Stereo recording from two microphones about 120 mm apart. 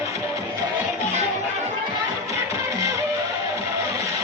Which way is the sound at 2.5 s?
25° right (ahead or behind).